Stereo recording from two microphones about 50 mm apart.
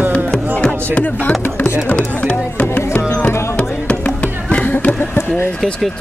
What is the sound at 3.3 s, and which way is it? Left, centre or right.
Music, left.